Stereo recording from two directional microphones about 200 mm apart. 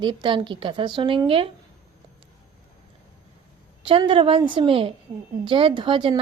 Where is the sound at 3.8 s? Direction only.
25° right (ahead or behind).